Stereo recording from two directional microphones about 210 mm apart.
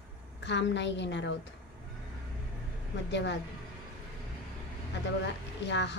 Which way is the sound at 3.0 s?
55° left (ahead or behind).